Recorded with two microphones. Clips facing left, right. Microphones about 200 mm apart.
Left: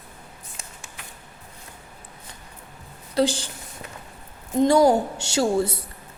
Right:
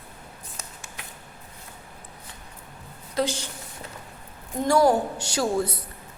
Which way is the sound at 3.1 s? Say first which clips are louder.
Left 4 dB; 30° left (ahead or behind).